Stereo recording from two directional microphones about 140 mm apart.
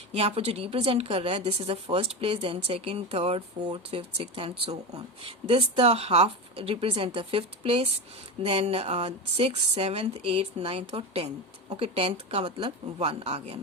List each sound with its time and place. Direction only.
0.1 s a woman's voice: 45° right (ahead or behind)
12.5 s speech: 30° right (ahead or behind)
13.0 s a woman's voice: 50° right (ahead or behind)